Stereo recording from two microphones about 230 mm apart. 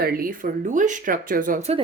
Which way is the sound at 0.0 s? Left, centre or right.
Right.